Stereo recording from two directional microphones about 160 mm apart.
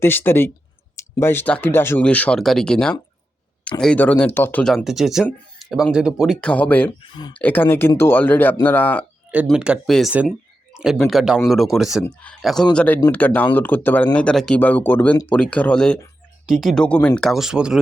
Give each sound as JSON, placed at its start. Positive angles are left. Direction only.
{"t": 0.0, "sound": "speech", "side_deg": 15}
{"t": 4.6, "sound": "speech", "side_deg": 0}
{"t": 7.0, "sound": "speech", "side_deg": 30}
{"t": 7.3, "sound": "speech", "side_deg": 10}
{"t": 9.3, "sound": "speech", "side_deg": -5}